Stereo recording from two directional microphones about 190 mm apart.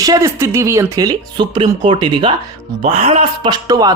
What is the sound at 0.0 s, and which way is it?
Speech, 15° right (ahead or behind).